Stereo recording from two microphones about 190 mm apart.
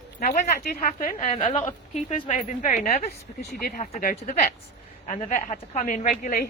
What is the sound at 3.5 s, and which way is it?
A woman's voice, 50° left (ahead or behind).